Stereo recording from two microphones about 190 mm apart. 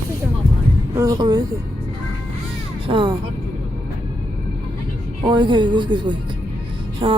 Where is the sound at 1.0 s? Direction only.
20° right (ahead or behind).